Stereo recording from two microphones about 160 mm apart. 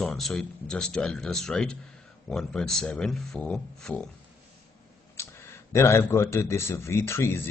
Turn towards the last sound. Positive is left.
turn(degrees=15)  # may be behind; listen again after turning